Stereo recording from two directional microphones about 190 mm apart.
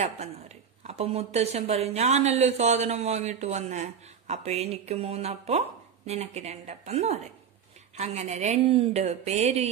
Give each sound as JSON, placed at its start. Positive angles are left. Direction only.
{"t": 0.8, "sound": "speech", "side_deg": -35}